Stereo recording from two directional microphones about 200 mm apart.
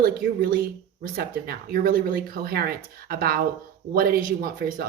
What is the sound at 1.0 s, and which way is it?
A woman's voice, 45° right (ahead or behind).